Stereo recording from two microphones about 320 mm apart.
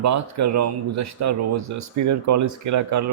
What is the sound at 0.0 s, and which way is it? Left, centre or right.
Speech, right.